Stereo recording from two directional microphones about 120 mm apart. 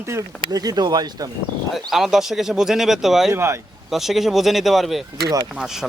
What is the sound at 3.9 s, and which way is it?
Speech, centre (ahead or behind).